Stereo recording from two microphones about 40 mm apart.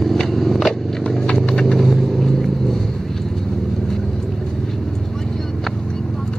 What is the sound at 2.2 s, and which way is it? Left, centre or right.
Vehicle, centre.